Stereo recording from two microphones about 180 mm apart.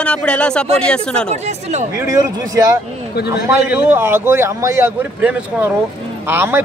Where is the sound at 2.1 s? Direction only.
20° right (ahead or behind).